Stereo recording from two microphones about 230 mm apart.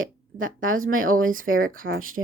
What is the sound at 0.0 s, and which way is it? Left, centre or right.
Speech, right.